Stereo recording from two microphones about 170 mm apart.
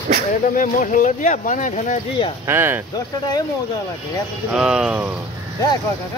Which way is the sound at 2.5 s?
15° right (ahead or behind).